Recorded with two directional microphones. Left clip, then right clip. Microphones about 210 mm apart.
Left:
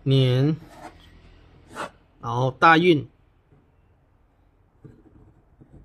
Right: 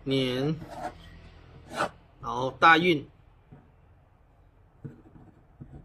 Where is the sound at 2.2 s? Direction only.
55° left (ahead or behind).